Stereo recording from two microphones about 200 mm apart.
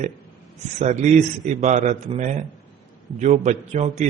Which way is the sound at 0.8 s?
35° right (ahead or behind).